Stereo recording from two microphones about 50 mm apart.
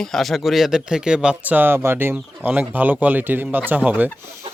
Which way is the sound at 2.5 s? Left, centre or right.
Right.